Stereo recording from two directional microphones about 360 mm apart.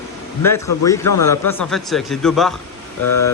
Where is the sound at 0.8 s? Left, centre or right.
Centre.